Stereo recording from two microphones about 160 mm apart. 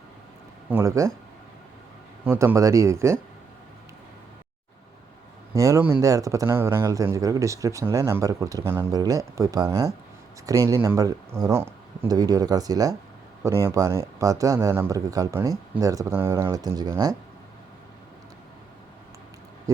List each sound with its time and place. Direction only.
0.7 s speech: 15° right (ahead or behind)
2.2 s speech: 15° right (ahead or behind)
5.5 s speech: 20° right (ahead or behind)
19.7 s a sound: 20° right (ahead or behind)